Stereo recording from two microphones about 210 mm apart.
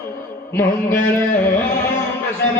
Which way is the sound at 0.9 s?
40° left (ahead or behind).